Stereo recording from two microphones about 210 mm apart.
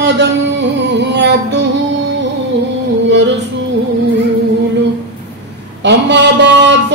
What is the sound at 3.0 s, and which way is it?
Music, 55° right (ahead or behind).